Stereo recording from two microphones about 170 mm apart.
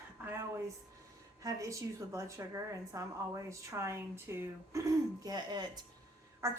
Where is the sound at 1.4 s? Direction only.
20° right (ahead or behind).